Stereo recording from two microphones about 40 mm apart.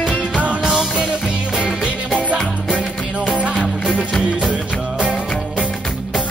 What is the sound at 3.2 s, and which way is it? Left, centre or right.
Music, right.